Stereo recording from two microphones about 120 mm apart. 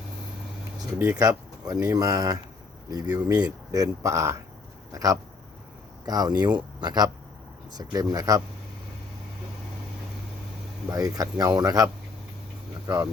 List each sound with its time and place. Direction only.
0.9 s speech: 15° right (ahead or behind)
1.2 s speech: 30° right (ahead or behind)
10.8 s speech: 30° right (ahead or behind)